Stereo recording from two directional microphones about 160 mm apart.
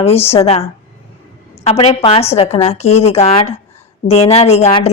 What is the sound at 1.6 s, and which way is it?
A woman's voice, 40° left (ahead or behind).